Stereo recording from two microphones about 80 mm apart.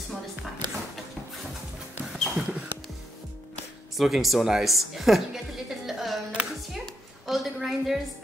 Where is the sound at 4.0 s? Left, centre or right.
Centre.